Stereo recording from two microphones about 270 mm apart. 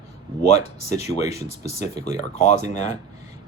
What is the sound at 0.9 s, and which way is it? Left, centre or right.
Speech, left.